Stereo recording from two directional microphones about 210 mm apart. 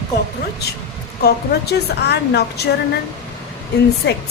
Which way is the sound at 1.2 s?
50° left (ahead or behind).